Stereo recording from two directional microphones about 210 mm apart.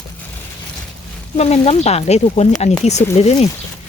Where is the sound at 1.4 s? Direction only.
30° left (ahead or behind).